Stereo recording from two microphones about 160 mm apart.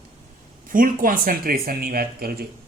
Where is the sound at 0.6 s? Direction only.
60° right (ahead or behind).